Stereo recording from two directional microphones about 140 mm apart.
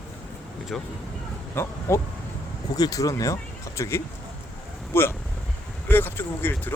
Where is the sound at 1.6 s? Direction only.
15° left (ahead or behind).